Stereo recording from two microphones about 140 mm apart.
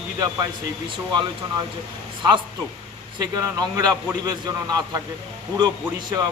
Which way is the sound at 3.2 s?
25° right (ahead or behind).